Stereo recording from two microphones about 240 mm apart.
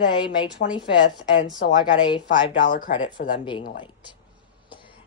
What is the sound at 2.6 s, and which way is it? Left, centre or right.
Speech, left.